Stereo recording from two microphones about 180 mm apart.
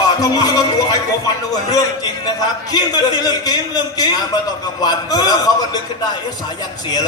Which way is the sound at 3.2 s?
20° left (ahead or behind).